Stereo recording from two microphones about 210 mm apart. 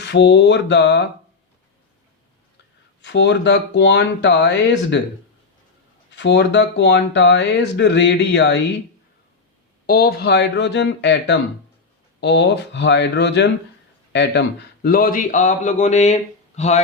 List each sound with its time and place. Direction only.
0.0 s speech: 55° left (ahead or behind)
3.0 s speech: 55° left (ahead or behind)
6.1 s speech: 55° left (ahead or behind)
9.8 s a man's voice: 45° left (ahead or behind)